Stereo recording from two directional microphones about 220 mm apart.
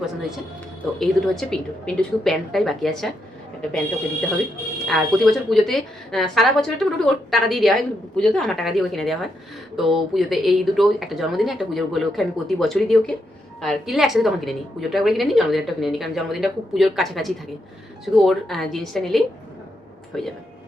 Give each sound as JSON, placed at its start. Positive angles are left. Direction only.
{"t": 0.9, "sound": "speech", "side_deg": 0}
{"t": 4.9, "sound": "speech", "side_deg": 0}